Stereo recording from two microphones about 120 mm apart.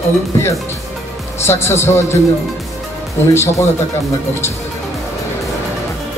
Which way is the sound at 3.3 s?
20° left (ahead or behind).